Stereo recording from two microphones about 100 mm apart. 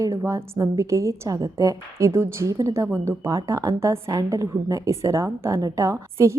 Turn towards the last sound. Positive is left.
turn(degrees=-30)  # may be behind; listen again after turning